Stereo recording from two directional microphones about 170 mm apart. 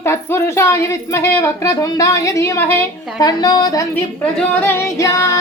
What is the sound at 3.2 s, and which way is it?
Female singing, 25° left (ahead or behind).